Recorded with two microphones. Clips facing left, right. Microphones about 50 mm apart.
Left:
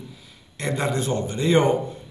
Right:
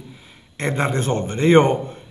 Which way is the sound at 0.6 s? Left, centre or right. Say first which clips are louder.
Right 3 dB; right.